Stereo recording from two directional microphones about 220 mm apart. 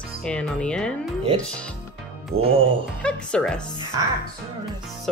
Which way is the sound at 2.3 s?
45° right (ahead or behind).